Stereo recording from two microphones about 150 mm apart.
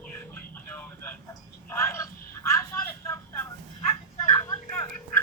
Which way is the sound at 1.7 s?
15° left (ahead or behind).